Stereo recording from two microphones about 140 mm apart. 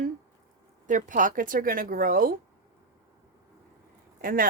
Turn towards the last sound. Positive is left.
turn(degrees=-90)